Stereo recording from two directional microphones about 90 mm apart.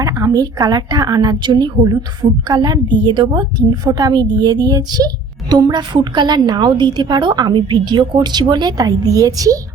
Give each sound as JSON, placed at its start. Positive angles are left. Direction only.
{"t": 0.0, "sound": "a woman's voice", "side_deg": -40}